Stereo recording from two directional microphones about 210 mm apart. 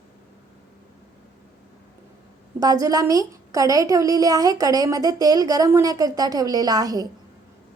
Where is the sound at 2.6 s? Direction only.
15° right (ahead or behind).